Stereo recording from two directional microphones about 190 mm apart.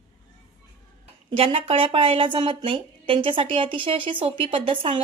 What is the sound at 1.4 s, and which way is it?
A woman's voice, 30° right (ahead or behind).